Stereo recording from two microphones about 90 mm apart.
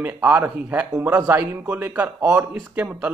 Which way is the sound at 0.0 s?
20° right (ahead or behind).